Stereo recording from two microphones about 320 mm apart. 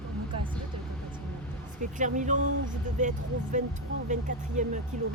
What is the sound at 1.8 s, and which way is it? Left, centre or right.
Speech, right.